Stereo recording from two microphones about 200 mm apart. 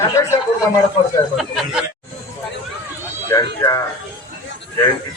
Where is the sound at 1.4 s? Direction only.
Centre (ahead or behind).